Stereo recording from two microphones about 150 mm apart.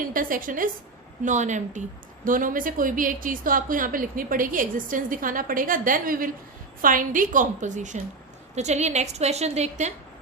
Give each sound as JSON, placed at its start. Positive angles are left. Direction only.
{"t": 0.1, "sound": "a woman's voice", "side_deg": -65}
{"t": 2.2, "sound": "a woman's voice", "side_deg": -65}